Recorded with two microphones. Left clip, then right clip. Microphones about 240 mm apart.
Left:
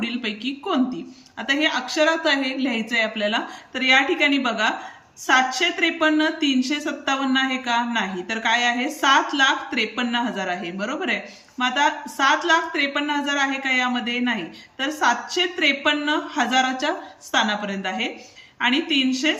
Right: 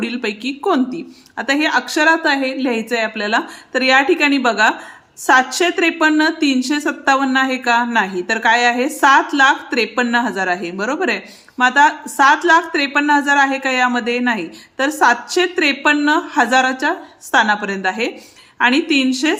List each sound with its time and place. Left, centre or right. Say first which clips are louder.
0.0 s a woman's voice: right 5 dB; centre